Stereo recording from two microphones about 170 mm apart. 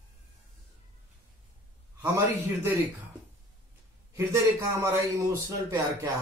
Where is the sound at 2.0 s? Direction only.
15° right (ahead or behind).